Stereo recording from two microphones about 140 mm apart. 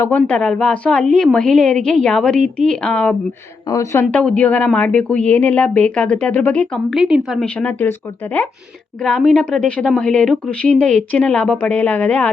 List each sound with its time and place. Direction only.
0.0 s a woman's voice: 10° left (ahead or behind)
3.7 s speech: 25° left (ahead or behind)
4.1 s a woman's voice: 5° left (ahead or behind)
9.0 s a woman's voice: 5° left (ahead or behind)